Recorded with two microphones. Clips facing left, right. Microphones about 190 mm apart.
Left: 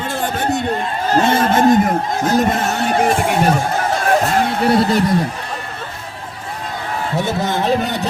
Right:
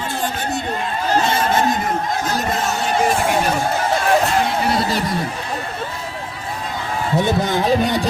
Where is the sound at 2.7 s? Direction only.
60° left (ahead or behind).